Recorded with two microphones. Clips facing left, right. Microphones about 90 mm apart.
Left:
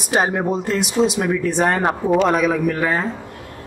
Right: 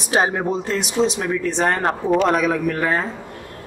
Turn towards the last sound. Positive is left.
turn(degrees=0)  # may be behind; listen again after turning